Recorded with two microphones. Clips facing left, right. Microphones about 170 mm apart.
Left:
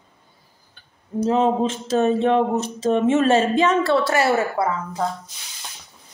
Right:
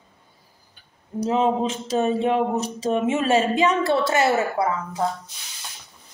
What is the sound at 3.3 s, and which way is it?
A woman's voice, 15° right (ahead or behind).